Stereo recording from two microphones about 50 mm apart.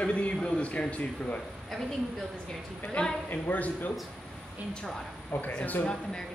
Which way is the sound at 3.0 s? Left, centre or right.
Left.